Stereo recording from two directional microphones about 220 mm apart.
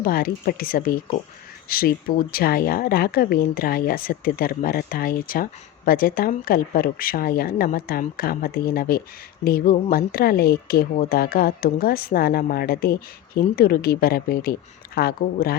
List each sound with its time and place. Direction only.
0.0 s a woman's voice: 40° left (ahead or behind)